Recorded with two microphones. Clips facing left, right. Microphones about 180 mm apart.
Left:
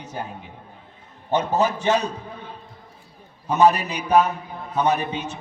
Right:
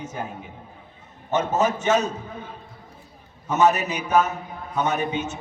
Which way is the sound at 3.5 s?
35° left (ahead or behind).